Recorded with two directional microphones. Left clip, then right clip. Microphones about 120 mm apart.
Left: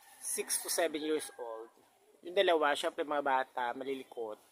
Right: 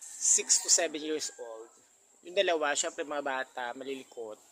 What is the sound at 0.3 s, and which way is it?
Speech, 15° left (ahead or behind).